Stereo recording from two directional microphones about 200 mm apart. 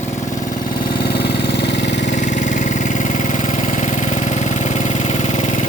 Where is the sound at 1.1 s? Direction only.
55° left (ahead or behind).